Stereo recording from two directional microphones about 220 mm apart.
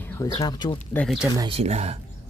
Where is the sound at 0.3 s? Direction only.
20° left (ahead or behind).